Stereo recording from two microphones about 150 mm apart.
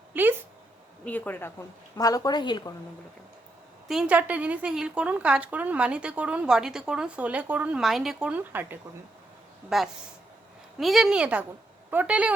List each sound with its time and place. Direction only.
0.1 s a sound: 15° right (ahead or behind)
1.0 s a woman's voice: 10° left (ahead or behind); by 2.7 s 30° left (ahead or behind)
3.8 s a woman's voice: 5° right (ahead or behind)